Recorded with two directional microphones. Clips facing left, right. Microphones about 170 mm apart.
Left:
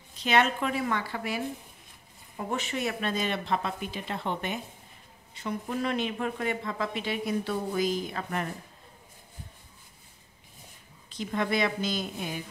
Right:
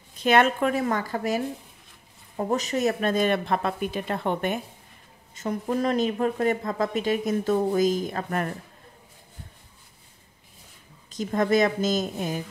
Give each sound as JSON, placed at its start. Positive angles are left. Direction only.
{"t": 0.2, "sound": "speech", "side_deg": -50}
{"t": 11.1, "sound": "speech", "side_deg": -45}